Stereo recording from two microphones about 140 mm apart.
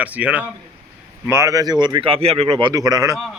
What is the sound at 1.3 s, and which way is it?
Speech, 20° right (ahead or behind).